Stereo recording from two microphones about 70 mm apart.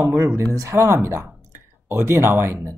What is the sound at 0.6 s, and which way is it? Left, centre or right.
Speech, right.